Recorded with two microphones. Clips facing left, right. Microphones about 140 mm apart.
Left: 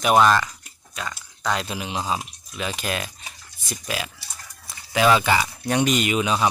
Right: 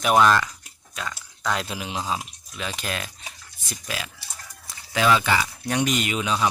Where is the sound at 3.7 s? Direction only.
15° left (ahead or behind).